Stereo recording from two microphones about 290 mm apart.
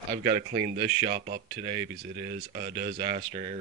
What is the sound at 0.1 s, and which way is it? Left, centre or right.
Speech, right.